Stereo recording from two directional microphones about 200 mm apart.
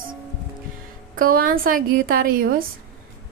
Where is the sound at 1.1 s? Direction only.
45° right (ahead or behind).